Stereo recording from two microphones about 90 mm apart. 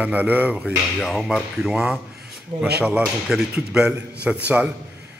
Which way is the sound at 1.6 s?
5° right (ahead or behind).